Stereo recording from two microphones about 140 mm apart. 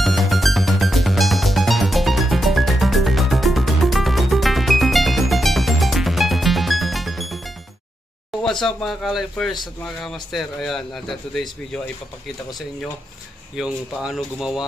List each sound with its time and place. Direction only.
0.0 s music: centre (ahead or behind)
8.4 s a man's voice: 5° left (ahead or behind)
13.6 s a man's voice: 5° right (ahead or behind)